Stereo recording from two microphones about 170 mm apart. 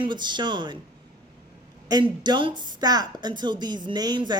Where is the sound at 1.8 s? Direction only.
25° right (ahead or behind).